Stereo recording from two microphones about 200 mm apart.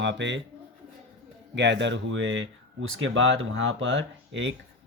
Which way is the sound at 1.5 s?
60° right (ahead or behind).